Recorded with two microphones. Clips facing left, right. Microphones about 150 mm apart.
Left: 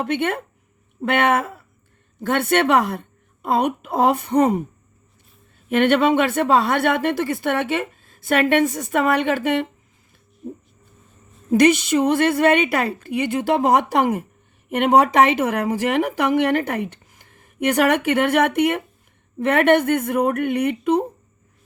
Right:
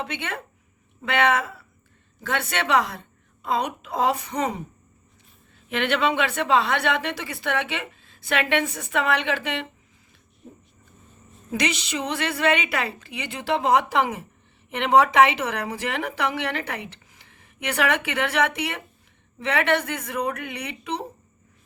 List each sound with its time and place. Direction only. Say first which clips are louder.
0.0 s speech: left 9 dB; 50° left (ahead or behind)
5.6 s speech: left 7 dB; 45° left (ahead or behind)
11.5 s speech: left 12 dB; 50° left (ahead or behind)